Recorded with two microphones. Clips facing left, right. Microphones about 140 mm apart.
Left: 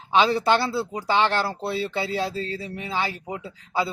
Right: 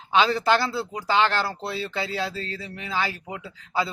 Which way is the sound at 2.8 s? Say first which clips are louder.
Right 1 dB; 15° left (ahead or behind).